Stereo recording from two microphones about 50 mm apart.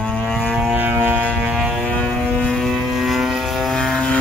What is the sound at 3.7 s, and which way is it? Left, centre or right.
Vehicle, centre.